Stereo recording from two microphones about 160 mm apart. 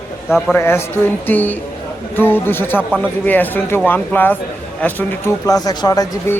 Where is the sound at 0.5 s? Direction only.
15° left (ahead or behind).